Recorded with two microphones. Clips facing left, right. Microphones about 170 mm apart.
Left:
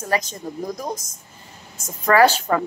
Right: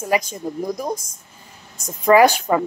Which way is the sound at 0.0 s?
10° right (ahead or behind).